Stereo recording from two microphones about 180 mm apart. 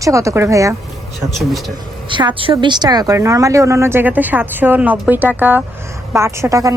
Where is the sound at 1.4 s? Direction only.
Centre (ahead or behind).